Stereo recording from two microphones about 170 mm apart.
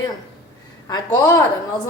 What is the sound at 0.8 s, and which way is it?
Speech, 20° left (ahead or behind).